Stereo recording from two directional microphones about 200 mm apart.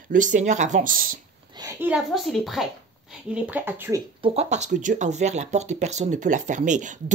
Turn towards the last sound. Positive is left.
turn(degrees=-40)  # may be behind; listen again after turning